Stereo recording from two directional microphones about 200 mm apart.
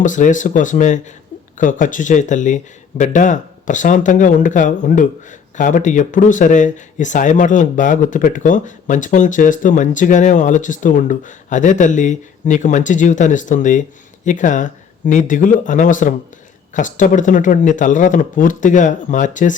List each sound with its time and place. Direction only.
0.0 s speech: 40° left (ahead or behind)